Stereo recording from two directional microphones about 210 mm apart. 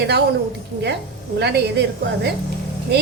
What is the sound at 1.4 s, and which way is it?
Speech, 50° right (ahead or behind).